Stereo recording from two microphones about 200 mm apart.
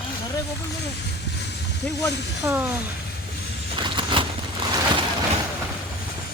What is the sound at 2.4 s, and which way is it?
Speech, 10° right (ahead or behind).